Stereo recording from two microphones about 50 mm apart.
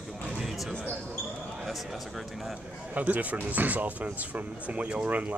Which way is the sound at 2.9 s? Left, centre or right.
Right.